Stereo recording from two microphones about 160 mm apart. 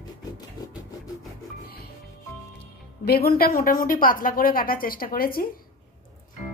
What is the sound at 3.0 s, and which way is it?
A woman's voice, 70° left (ahead or behind).